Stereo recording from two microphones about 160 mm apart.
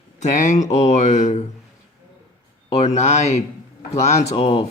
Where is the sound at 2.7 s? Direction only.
40° left (ahead or behind).